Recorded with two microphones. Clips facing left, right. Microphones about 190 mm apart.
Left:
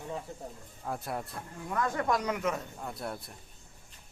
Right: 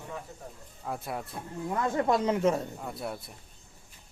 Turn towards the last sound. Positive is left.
turn(degrees=0)  # may be behind; listen again after turning